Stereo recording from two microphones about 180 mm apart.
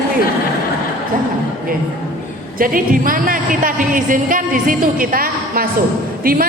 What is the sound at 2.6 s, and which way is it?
A woman's voice, 50° right (ahead or behind).